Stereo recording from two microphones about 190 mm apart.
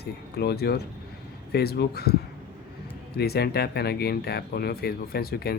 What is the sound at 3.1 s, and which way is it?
Speech, 55° left (ahead or behind).